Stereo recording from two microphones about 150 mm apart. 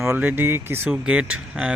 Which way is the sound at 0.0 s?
15° right (ahead or behind).